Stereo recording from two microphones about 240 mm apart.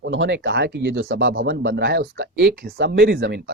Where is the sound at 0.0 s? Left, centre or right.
Right.